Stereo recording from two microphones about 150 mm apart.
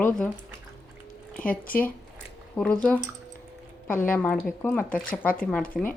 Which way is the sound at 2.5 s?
10° left (ahead or behind).